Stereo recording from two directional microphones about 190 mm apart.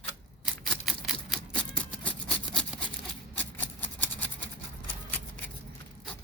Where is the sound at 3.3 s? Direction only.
10° left (ahead or behind).